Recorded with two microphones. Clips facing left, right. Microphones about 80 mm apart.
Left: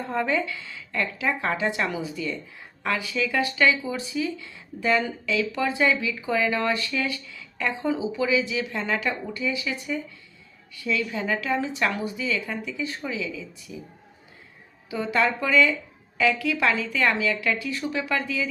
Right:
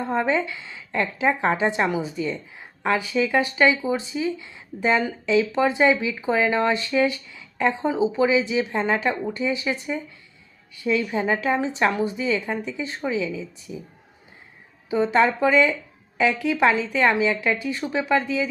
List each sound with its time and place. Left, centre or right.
0.0 s a woman's voice: right
14.8 s a woman's voice: right